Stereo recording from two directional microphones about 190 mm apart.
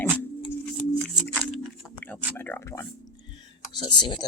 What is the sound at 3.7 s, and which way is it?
Speech, 25° left (ahead or behind).